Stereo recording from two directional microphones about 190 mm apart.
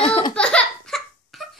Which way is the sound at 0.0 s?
30° left (ahead or behind).